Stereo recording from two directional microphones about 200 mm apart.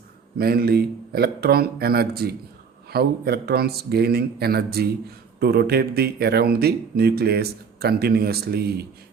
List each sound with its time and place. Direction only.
0.3 s speech: 50° right (ahead or behind)